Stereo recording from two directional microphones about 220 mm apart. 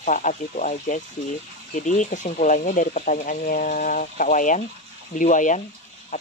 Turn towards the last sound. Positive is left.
turn(degrees=35)  # may be behind; listen again after turning